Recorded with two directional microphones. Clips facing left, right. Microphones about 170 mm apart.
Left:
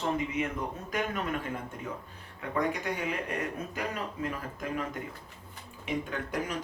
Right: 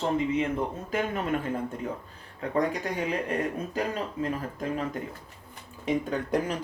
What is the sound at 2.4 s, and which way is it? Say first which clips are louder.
Speech: right 5 dB; 35° right (ahead or behind).